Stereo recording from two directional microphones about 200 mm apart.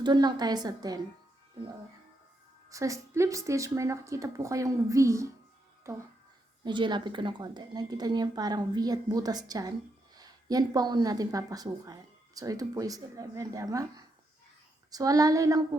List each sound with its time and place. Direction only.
0.0 s a woman's voice: 20° right (ahead or behind)
2.6 s speech: 15° right (ahead or behind)
6.7 s a woman's voice: 25° right (ahead or behind)
14.8 s speech: 20° right (ahead or behind)